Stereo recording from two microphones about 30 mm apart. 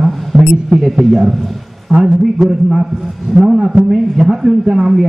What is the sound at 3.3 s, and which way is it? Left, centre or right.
A man's voice, centre.